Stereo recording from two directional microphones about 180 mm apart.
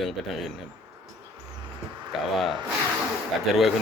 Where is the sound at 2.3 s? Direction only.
Centre (ahead or behind).